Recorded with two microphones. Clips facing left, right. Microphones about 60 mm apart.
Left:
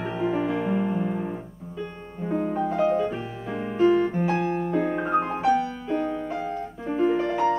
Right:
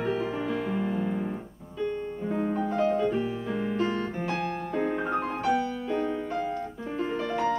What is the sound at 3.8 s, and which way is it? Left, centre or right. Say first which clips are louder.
Piano: left 9 dB; centre.